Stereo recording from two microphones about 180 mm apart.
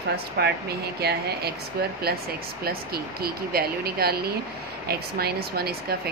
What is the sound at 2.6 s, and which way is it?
Speech, 55° right (ahead or behind).